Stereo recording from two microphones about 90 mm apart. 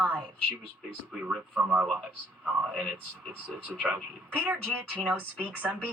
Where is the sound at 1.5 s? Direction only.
10° right (ahead or behind).